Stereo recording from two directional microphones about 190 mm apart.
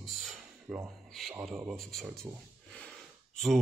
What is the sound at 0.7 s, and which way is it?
Speech, 5° right (ahead or behind).